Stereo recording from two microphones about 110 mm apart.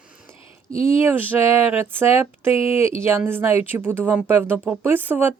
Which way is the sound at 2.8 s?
25° right (ahead or behind).